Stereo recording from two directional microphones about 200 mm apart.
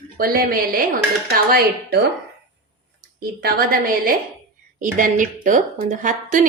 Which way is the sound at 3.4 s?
50° right (ahead or behind).